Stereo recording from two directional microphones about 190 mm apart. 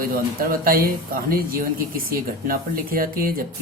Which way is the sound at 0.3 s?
50° right (ahead or behind).